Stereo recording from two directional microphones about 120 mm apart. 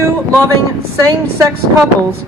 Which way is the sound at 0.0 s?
25° right (ahead or behind).